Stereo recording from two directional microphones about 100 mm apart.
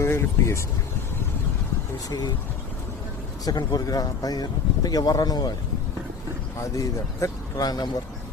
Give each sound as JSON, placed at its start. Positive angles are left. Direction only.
{"t": 0.0, "sound": "speech", "side_deg": 25}
{"t": 3.4, "sound": "speech", "side_deg": 40}
{"t": 6.6, "sound": "speech", "side_deg": 35}